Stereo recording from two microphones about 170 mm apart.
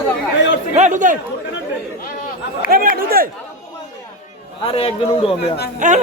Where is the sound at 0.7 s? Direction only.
45° right (ahead or behind).